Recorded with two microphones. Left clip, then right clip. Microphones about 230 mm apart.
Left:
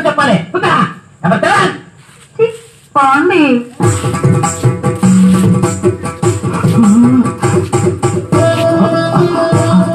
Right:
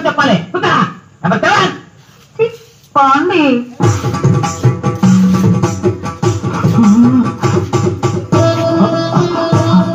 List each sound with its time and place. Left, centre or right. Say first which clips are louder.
0.0 s cough: left 1 dB; left
1.2 s a sound: left 1 dB; left
2.9 s music: left 1 dB; left